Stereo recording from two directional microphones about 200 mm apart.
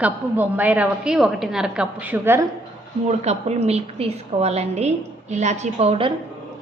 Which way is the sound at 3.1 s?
35° right (ahead or behind).